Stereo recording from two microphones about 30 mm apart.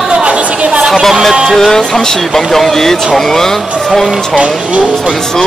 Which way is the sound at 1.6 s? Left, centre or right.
Centre.